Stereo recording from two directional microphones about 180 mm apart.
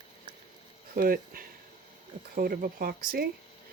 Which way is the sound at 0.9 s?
55° right (ahead or behind).